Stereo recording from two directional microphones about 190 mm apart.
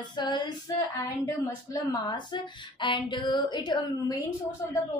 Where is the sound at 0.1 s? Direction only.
25° left (ahead or behind).